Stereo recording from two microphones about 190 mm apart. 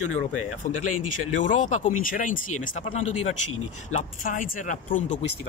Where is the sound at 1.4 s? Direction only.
40° left (ahead or behind).